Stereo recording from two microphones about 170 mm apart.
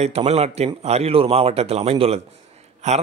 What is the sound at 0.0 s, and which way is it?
A man's voice, 40° right (ahead or behind).